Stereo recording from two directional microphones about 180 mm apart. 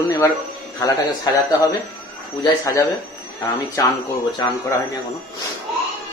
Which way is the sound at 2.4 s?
20° left (ahead or behind).